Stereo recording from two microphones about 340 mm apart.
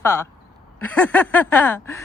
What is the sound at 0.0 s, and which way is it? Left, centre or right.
Speech, centre.